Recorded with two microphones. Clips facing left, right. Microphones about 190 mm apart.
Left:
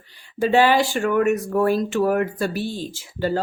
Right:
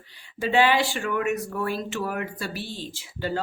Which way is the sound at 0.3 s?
45° left (ahead or behind).